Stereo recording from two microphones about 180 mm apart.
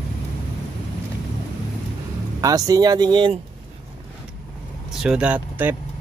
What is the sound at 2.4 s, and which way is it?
Speech, 20° right (ahead or behind).